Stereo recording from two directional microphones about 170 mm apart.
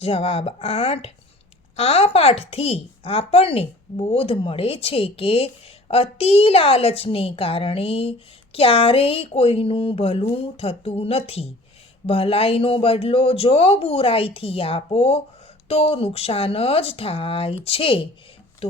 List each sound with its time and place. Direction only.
0.0 s speech: 35° left (ahead or behind)